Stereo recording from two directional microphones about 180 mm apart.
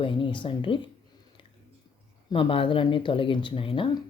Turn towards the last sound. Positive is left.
turn(degrees=30)  # may be behind; listen again after turning